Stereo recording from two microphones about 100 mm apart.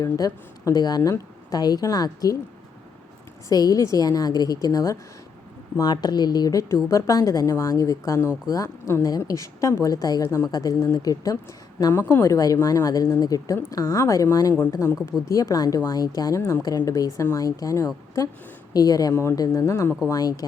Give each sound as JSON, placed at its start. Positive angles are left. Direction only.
{"t": 0.0, "sound": "a woman's voice", "side_deg": 30}
{"t": 3.5, "sound": "a woman's voice", "side_deg": 40}
{"t": 19.1, "sound": "a woman's voice", "side_deg": 25}